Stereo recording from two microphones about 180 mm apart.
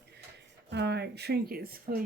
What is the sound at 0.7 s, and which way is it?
Speech, 70° right (ahead or behind).